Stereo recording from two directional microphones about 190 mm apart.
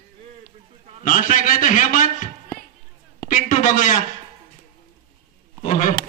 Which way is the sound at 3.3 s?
45° left (ahead or behind).